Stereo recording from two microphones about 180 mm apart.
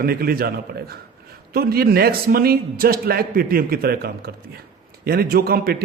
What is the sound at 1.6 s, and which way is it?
A man's voice, 60° right (ahead or behind).